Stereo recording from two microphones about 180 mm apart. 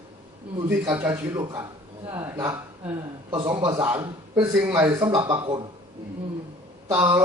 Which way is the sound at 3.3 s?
25° right (ahead or behind).